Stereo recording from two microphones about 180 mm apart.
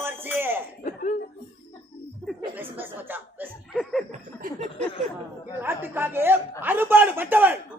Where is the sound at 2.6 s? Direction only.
10° right (ahead or behind).